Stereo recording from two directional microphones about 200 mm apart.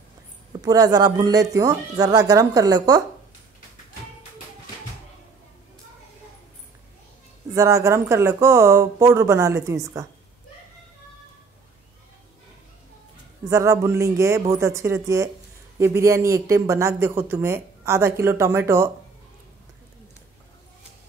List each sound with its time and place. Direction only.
0.6 s speech: 20° right (ahead or behind)
7.5 s speech: 15° right (ahead or behind)
13.5 s speech: 15° right (ahead or behind)